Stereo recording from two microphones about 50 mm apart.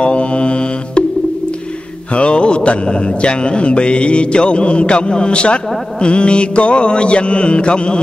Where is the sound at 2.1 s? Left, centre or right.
Left.